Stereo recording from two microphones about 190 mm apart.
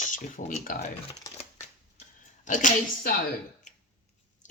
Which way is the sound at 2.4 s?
40° left (ahead or behind).